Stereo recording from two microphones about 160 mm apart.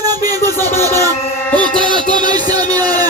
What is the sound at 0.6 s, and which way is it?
Music, 15° left (ahead or behind).